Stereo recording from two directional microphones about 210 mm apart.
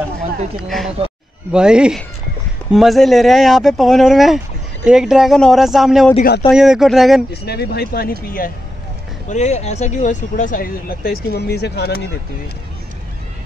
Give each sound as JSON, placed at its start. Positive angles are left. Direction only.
{"t": 0.6, "sound": "speech", "side_deg": 0}
{"t": 7.4, "sound": "speech", "side_deg": 50}
{"t": 9.3, "sound": "speech", "side_deg": 35}